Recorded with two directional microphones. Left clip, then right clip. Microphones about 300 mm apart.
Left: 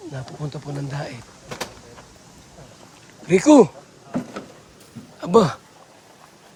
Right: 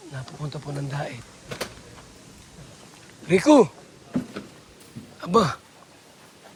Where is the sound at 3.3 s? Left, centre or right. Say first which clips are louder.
Left 3 dB; centre.